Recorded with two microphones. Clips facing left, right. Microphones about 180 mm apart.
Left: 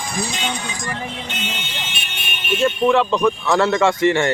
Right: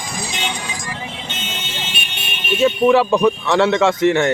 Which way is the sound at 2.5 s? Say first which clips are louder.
Right 3 dB; 5° right (ahead or behind).